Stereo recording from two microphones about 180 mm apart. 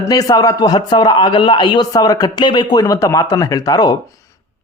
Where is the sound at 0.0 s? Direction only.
20° left (ahead or behind).